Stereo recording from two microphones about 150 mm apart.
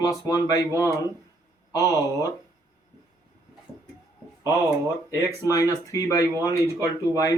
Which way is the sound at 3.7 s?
25° right (ahead or behind).